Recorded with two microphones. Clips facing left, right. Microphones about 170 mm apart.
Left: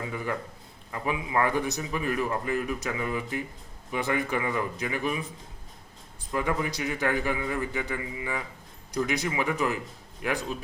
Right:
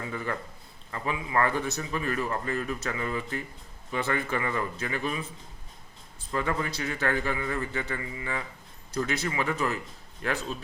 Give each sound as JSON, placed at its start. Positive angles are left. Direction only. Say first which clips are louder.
{"t": 0.0, "sound": "a sound", "louder": "left 1 dB", "side_deg": 15}
{"t": 0.9, "sound": "a man's voice", "louder": "left 2 dB", "side_deg": 15}
{"t": 6.3, "sound": "a man's voice", "louder": "left 1 dB", "side_deg": 15}